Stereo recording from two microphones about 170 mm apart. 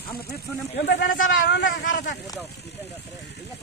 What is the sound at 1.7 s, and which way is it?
Speech, 60° left (ahead or behind).